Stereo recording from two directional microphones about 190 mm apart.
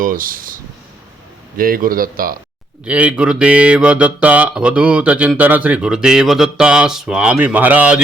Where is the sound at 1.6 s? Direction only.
50° right (ahead or behind).